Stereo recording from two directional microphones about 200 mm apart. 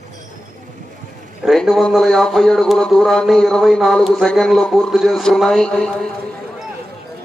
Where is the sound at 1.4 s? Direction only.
Centre (ahead or behind).